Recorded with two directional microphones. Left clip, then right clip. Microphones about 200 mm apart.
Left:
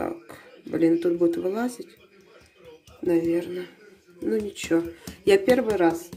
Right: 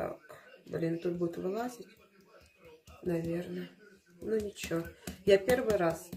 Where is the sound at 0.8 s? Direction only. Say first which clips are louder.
Left 13 dB; 50° left (ahead or behind).